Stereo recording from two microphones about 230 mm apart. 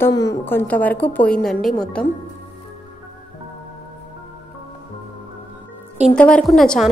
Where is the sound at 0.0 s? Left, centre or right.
Centre.